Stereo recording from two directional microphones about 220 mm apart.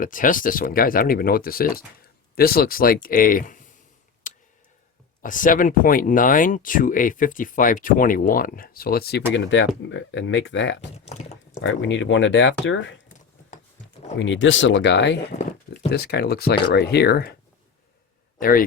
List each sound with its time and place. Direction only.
0.0 s speech: 40° left (ahead or behind)
4.2 s tick: 35° left (ahead or behind)
5.2 s speech: 35° left (ahead or behind)
9.3 s speech: 55° left (ahead or behind)
11.0 s a sound: 30° left (ahead or behind)
11.6 s speech: 60° left (ahead or behind)
14.2 s speech: 60° left (ahead or behind)
15.4 s speech: 30° left (ahead or behind)
15.9 s speech: 45° left (ahead or behind)
18.3 s speech: 40° left (ahead or behind)